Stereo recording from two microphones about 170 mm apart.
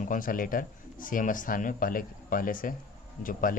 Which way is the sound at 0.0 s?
50° left (ahead or behind).